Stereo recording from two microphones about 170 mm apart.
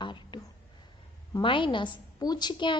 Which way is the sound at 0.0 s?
25° left (ahead or behind).